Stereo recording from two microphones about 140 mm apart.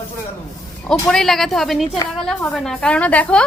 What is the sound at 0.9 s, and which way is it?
A woman's voice, 5° left (ahead or behind).